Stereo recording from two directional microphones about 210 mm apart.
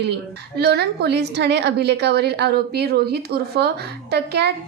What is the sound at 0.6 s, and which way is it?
Speech, 50° right (ahead or behind).